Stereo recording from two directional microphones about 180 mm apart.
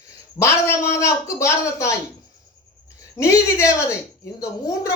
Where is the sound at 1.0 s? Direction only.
15° left (ahead or behind).